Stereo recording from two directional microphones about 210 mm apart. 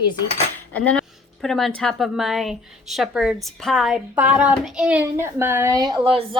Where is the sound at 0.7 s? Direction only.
5° left (ahead or behind).